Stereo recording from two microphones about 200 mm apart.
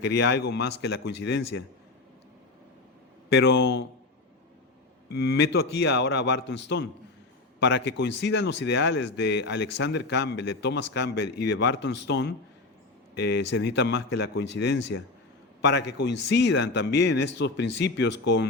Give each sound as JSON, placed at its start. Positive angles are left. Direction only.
{"t": 0.0, "sound": "speech", "side_deg": 60}
{"t": 3.2, "sound": "speech", "side_deg": 55}
{"t": 5.0, "sound": "speech", "side_deg": 55}